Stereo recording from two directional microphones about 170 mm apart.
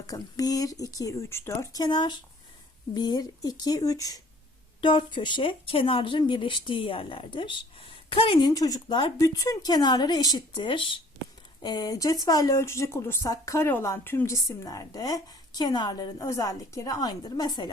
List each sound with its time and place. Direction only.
0.1 s speech: 20° left (ahead or behind)